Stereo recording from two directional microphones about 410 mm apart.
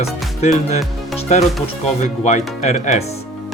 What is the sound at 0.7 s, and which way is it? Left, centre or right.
Speech, centre.